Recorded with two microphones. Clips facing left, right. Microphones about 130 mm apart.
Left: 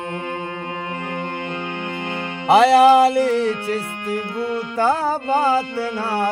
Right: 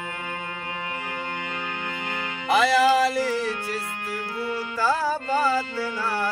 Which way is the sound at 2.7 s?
65° left (ahead or behind).